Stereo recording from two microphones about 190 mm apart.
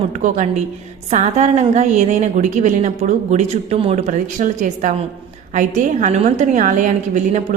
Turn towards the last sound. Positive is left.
turn(degrees=-40)  # may be behind; listen again after turning